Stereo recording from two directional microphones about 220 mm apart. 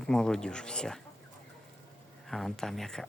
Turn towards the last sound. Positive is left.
turn(degrees=0)  # may be behind; listen again after turning